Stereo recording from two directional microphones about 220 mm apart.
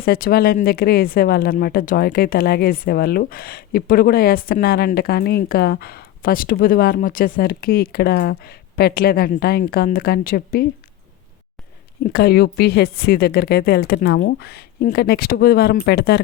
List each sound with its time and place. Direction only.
0.0 s speech: 45° left (ahead or behind)
12.1 s speech: 45° left (ahead or behind)